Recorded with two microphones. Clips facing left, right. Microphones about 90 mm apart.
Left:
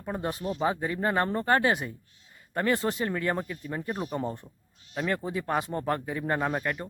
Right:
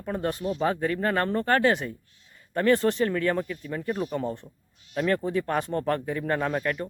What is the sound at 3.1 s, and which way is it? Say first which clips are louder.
Speech: right 3 dB; 20° left (ahead or behind).